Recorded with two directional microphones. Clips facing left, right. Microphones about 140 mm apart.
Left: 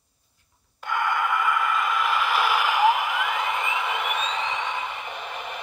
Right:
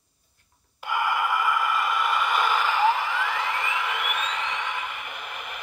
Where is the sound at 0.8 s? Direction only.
5° right (ahead or behind); by 4.8 s 25° left (ahead or behind).